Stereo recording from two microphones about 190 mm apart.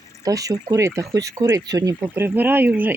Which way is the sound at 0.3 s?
20° right (ahead or behind).